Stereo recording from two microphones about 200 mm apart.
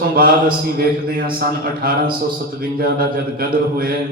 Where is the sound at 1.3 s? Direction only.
50° right (ahead or behind).